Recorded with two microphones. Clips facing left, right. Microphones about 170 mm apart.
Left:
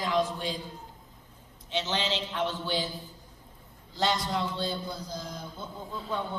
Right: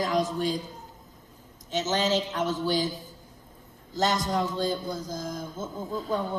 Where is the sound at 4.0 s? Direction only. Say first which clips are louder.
Right 3 dB; 45° right (ahead or behind).